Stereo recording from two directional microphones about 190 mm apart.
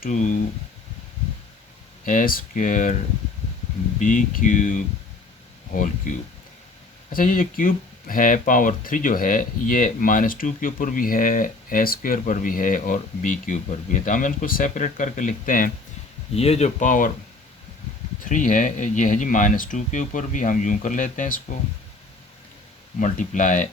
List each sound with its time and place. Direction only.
0.0 s speech: 40° left (ahead or behind)
2.0 s speech: 45° left (ahead or behind)
4.0 s speech: 45° left (ahead or behind)
16.3 s speech: 35° left (ahead or behind)
18.3 s speech: 40° left (ahead or behind)
23.0 s speech: 40° left (ahead or behind)